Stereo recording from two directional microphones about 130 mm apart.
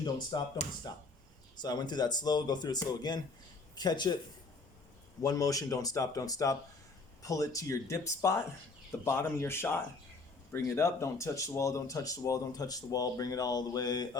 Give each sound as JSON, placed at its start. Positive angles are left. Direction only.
{"t": 0.3, "sound": "speech", "side_deg": 30}
{"t": 5.2, "sound": "speech", "side_deg": 25}